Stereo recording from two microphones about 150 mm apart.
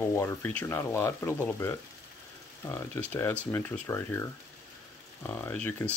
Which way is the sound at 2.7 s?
15° left (ahead or behind).